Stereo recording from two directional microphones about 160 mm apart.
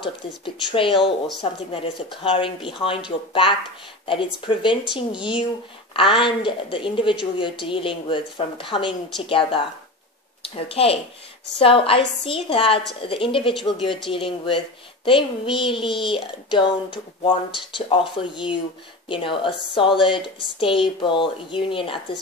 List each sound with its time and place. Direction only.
0.7 s a woman's voice: 30° left (ahead or behind)